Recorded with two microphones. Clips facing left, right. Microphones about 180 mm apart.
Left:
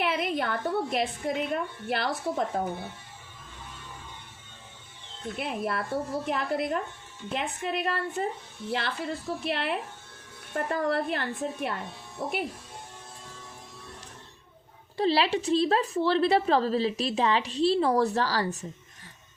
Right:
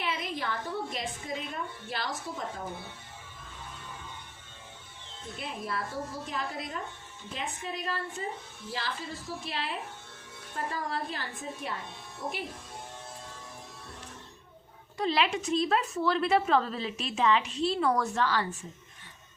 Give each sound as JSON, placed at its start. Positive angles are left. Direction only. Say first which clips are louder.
{"t": 0.0, "sound": "a woman's voice", "louder": "left 6 dB", "side_deg": 60}
{"t": 5.4, "sound": "a woman's voice", "louder": "left 5 dB", "side_deg": 60}
{"t": 14.9, "sound": "a woman's voice", "louder": "left 4 dB", "side_deg": 35}